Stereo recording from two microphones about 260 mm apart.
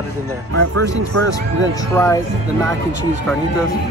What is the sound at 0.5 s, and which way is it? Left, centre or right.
Speech, right.